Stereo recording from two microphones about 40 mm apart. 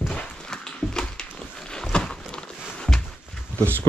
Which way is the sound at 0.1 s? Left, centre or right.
Centre.